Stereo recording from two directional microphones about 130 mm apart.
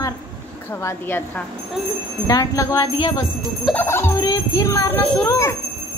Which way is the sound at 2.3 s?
30° left (ahead or behind).